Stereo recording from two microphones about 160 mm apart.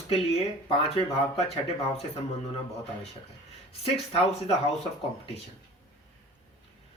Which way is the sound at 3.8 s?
35° left (ahead or behind).